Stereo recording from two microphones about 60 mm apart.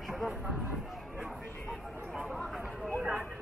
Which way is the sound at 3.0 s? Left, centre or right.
Right.